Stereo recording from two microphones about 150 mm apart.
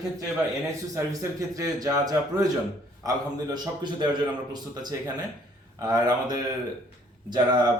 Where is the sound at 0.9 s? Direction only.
20° right (ahead or behind).